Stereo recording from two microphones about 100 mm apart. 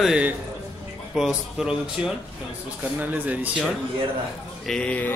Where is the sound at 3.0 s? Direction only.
15° right (ahead or behind).